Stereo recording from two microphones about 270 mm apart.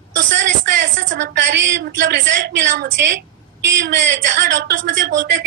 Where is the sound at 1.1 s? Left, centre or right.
Right.